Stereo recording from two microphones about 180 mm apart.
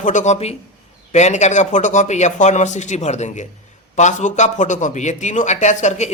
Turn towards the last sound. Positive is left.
turn(degrees=40)  # may be behind; listen again after turning